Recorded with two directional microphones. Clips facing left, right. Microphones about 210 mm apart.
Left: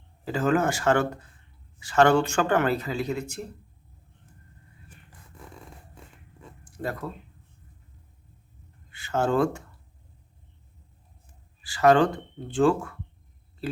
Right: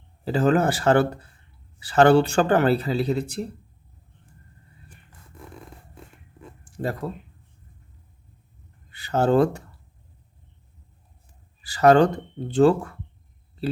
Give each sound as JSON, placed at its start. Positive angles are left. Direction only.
{"t": 0.3, "sound": "speech", "side_deg": -35}
{"t": 6.7, "sound": "speech", "side_deg": -30}
{"t": 8.9, "sound": "speech", "side_deg": -35}
{"t": 11.6, "sound": "speech", "side_deg": -40}